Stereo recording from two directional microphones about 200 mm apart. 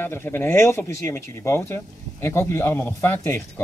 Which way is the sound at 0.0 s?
10° left (ahead or behind).